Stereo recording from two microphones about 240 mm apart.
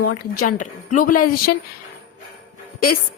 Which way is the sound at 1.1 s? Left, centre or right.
Left.